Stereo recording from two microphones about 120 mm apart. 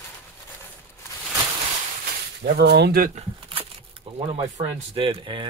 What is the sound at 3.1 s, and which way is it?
Crumpling, 50° right (ahead or behind).